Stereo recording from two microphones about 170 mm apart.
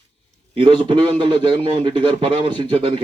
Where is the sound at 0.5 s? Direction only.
35° right (ahead or behind).